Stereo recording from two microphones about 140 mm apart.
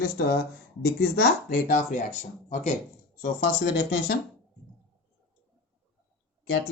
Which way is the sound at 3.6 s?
90° left.